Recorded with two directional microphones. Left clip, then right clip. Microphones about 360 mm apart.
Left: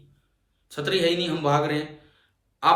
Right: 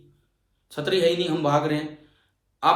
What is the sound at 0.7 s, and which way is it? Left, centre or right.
A man's voice, centre.